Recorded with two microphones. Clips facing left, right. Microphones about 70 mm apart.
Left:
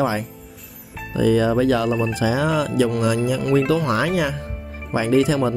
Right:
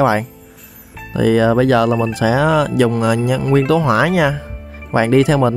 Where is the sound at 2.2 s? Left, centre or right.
Right.